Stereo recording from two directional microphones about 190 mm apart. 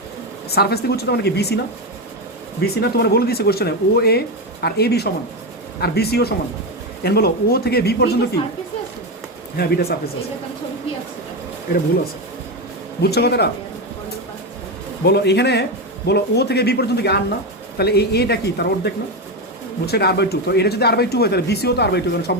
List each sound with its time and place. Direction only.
0.5 s speech: 55° left (ahead or behind)
2.6 s speech: 60° left (ahead or behind)
9.6 s speech: 60° left (ahead or behind)
13.0 s speech: 60° left (ahead or behind)
15.0 s speech: 60° left (ahead or behind)
19.8 s speech: 55° left (ahead or behind)